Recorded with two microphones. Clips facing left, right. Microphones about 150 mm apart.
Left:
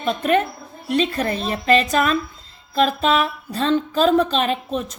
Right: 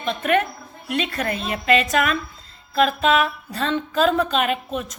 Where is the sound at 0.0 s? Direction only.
35° left (ahead or behind).